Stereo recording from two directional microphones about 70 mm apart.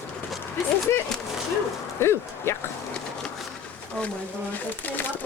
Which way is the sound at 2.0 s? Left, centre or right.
Left.